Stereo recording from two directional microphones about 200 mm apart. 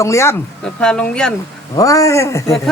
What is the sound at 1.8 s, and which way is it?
Speech, 15° left (ahead or behind).